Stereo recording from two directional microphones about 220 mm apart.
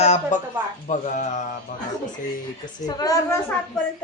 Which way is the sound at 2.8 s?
15° left (ahead or behind).